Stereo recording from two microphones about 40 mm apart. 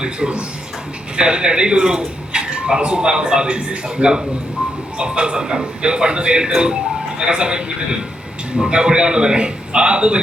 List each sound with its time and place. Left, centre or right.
0.0 s speech: right